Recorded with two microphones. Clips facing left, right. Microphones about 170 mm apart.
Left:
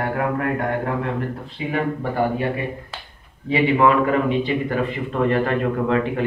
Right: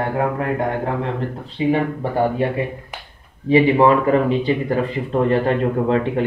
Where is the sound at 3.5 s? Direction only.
35° right (ahead or behind).